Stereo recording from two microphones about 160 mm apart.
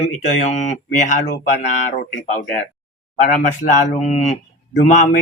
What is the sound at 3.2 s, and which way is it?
A man's voice, 50° left (ahead or behind).